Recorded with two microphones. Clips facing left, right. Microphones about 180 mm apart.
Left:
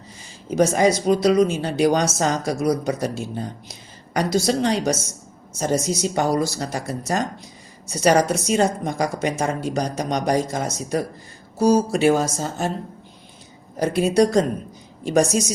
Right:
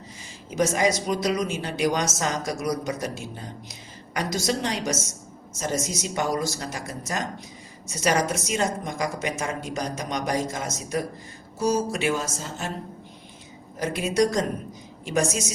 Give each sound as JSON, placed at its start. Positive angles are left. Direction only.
{"t": 0.5, "sound": "speech", "side_deg": 35}
{"t": 13.7, "sound": "speech", "side_deg": 35}